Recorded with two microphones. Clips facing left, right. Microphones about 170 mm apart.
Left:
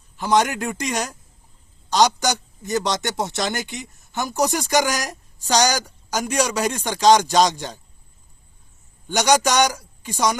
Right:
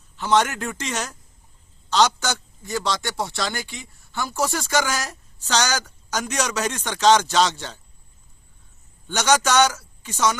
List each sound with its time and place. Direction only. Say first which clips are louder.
0.2 s a man's voice: left 1 dB; 15° left (ahead or behind)
9.0 s a man's voice: left 2 dB; 15° left (ahead or behind)